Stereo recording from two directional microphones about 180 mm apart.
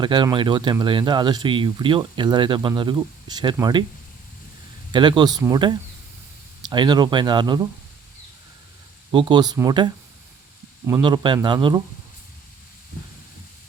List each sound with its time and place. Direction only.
0.0 s speech: 25° right (ahead or behind)
4.9 s speech: 25° right (ahead or behind)
9.1 s speech: 25° right (ahead or behind)
11.0 s speech: 25° right (ahead or behind)